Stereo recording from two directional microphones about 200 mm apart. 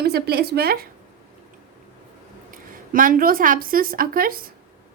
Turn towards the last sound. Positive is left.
turn(degrees=-45)  # may be behind; listen again after turning